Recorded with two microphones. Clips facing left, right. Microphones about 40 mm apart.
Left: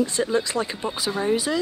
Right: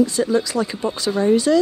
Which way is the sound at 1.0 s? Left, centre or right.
Centre.